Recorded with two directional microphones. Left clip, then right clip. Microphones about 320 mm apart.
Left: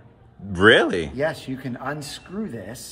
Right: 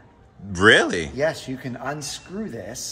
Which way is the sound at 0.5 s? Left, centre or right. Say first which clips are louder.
Even; centre.